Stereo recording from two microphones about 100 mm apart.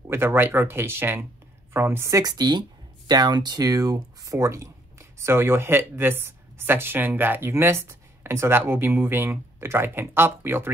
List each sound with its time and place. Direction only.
0.1 s speech: 25° right (ahead or behind)